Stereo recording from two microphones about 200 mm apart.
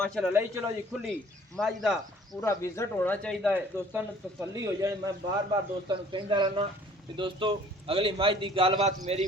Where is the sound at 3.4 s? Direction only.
5° right (ahead or behind).